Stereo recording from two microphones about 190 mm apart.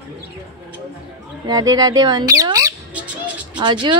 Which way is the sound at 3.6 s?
25° right (ahead or behind).